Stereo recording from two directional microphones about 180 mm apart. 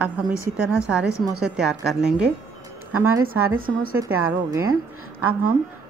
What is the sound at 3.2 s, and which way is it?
Speech, 50° right (ahead or behind).